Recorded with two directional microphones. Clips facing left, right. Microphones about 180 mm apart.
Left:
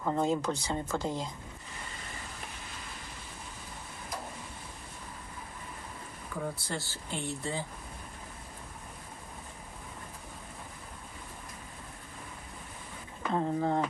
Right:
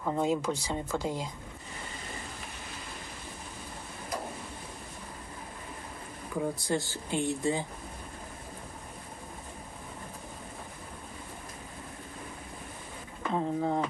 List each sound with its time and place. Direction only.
0.0 s speech: 5° right (ahead or behind)
6.4 s speech: 15° right (ahead or behind)
13.3 s speech: centre (ahead or behind)